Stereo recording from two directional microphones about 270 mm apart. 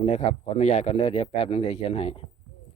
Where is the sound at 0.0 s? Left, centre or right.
Left.